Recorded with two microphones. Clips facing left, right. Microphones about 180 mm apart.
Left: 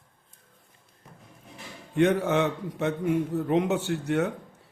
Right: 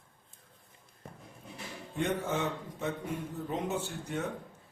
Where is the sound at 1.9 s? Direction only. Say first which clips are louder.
Left 10 dB; 75° left (ahead or behind).